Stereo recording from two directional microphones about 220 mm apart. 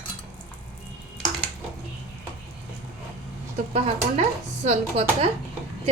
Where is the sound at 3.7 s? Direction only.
30° right (ahead or behind).